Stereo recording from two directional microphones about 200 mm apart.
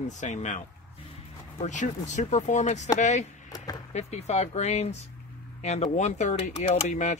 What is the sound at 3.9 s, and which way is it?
Speech, 35° left (ahead or behind).